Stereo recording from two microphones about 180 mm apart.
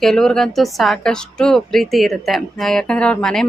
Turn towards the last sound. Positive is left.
turn(degrees=5)  # may be behind; listen again after turning